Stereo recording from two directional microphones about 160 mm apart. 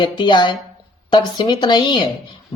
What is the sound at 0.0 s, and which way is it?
Speech, 30° left (ahead or behind).